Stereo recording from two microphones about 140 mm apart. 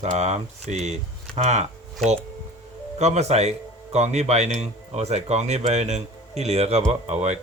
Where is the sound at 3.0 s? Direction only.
50° right (ahead or behind).